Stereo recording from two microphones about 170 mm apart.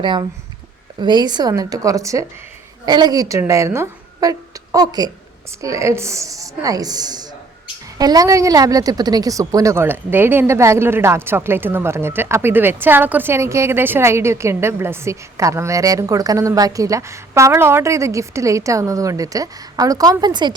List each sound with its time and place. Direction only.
0.0 s a woman's voice: 25° right (ahead or behind)